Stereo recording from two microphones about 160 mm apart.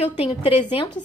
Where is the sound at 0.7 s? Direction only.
30° left (ahead or behind).